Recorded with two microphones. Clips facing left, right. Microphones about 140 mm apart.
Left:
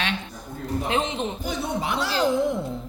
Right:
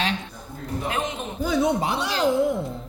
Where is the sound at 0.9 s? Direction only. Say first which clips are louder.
Left 2 dB; 25° left (ahead or behind).